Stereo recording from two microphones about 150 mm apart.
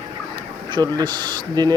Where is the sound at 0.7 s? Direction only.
30° right (ahead or behind).